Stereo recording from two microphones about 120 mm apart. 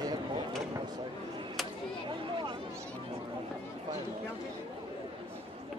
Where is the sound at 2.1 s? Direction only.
40° right (ahead or behind).